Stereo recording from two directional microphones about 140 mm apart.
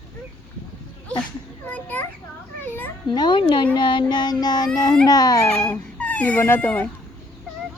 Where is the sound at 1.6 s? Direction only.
10° left (ahead or behind).